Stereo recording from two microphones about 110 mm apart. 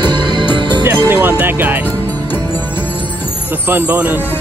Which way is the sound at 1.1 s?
15° right (ahead or behind).